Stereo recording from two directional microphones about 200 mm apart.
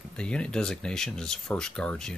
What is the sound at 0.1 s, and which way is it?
Speech, 5° left (ahead or behind).